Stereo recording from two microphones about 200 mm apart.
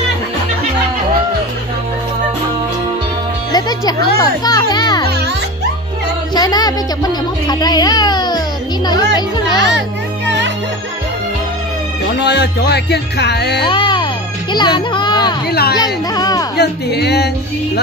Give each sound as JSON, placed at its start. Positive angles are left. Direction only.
{"t": 3.5, "sound": "music", "side_deg": 20}
{"t": 6.3, "sound": "music", "side_deg": 20}
{"t": 9.6, "sound": "music", "side_deg": -65}
{"t": 12.2, "sound": "speech", "side_deg": 55}
{"t": 13.7, "sound": "music", "side_deg": 25}
{"t": 14.5, "sound": "a sound", "side_deg": 20}
{"t": 15.8, "sound": "speech", "side_deg": 20}
{"t": 16.5, "sound": "speech", "side_deg": 55}